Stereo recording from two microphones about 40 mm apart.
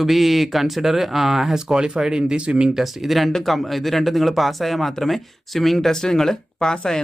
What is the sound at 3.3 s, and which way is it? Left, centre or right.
Speech, centre.